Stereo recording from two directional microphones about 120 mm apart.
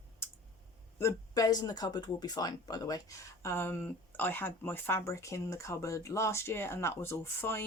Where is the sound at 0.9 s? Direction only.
25° left (ahead or behind).